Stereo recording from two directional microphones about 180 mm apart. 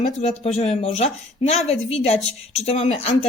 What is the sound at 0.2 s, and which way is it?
A woman's voice, 35° left (ahead or behind).